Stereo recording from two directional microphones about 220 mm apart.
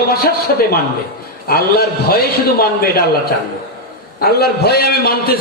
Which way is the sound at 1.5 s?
45° left (ahead or behind).